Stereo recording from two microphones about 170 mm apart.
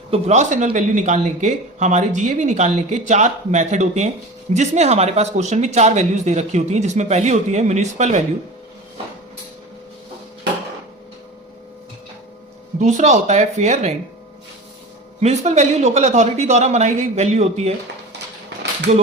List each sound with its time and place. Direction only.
0.1 s speech: 45° right (ahead or behind)
12.8 s speech: 45° right (ahead or behind)
15.2 s speech: 40° right (ahead or behind)
18.6 s a sound: 85° right